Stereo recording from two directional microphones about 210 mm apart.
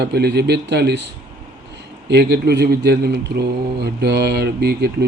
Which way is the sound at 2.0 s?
50° right (ahead or behind).